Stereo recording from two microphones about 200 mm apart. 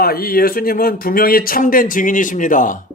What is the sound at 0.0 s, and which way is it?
A man's voice, 50° left (ahead or behind).